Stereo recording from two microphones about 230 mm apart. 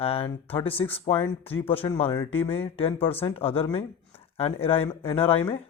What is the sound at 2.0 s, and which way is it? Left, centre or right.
Speech, centre.